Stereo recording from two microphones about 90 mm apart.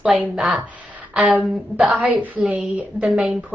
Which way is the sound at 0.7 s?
15° right (ahead or behind).